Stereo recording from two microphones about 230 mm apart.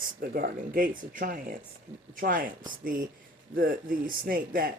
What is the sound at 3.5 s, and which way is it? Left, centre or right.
Speech, right.